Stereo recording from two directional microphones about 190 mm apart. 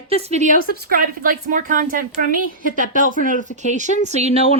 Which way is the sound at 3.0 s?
45° left (ahead or behind).